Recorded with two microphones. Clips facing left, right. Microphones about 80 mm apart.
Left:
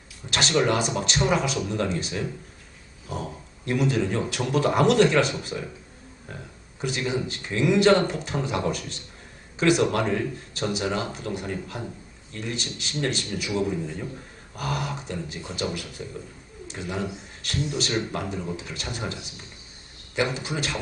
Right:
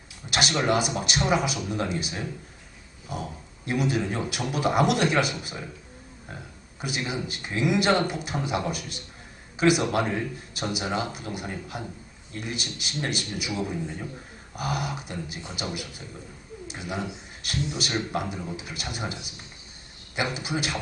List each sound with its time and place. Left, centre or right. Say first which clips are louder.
0.3 s speech: left 2 dB; centre
3.7 s speech: left 2 dB; centre
6.8 s speech: left 4 dB; centre